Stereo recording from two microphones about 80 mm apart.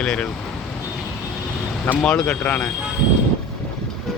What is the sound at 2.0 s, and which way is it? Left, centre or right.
Speech, centre.